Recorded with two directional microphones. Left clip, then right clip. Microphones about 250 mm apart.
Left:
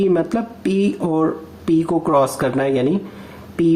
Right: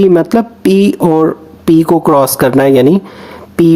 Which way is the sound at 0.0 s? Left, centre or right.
Right.